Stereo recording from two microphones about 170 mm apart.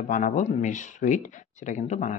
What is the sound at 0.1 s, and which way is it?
Speech, 45° left (ahead or behind).